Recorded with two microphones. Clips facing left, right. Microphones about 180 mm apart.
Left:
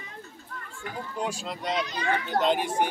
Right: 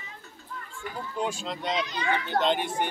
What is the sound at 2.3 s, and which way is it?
Speech, 5° left (ahead or behind).